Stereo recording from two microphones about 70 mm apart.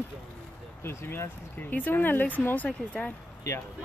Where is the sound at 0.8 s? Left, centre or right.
Left; by 3.1 s centre.